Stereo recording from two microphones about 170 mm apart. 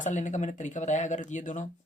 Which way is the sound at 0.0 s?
45° left (ahead or behind).